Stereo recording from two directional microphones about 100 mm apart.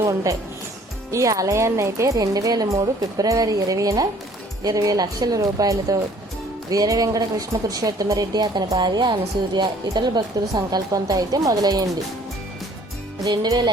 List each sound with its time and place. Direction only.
0.0 s a woman's voice: 35° right (ahead or behind)
13.2 s music: 45° right (ahead or behind)